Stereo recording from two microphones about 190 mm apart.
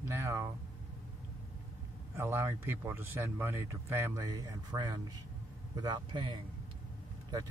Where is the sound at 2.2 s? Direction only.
10° right (ahead or behind).